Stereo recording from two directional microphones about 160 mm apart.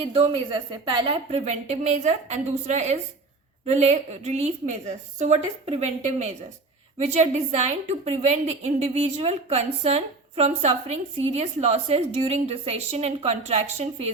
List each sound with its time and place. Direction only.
0.0 s a woman's voice: 35° right (ahead or behind)